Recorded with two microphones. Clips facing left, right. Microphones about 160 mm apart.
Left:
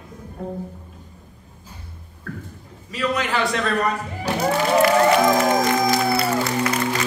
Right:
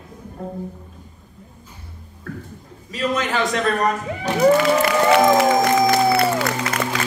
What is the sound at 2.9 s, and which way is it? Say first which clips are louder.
Speech: right 1 dB; 40° right (ahead or behind).